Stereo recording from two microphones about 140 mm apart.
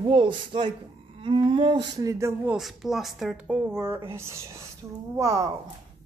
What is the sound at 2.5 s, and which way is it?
Speech, centre (ahead or behind).